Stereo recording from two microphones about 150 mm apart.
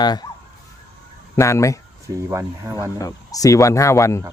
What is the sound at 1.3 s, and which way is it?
Speech, 20° left (ahead or behind).